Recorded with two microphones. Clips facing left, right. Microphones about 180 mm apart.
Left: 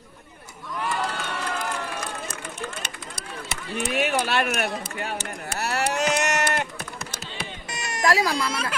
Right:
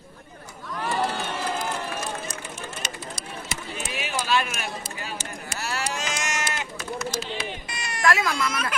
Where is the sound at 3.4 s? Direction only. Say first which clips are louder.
Left 7 dB; 60° left (ahead or behind).